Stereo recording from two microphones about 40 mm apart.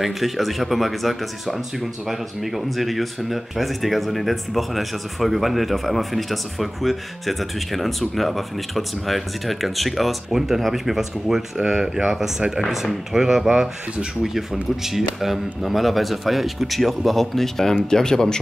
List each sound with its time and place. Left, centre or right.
0.0 s speech: centre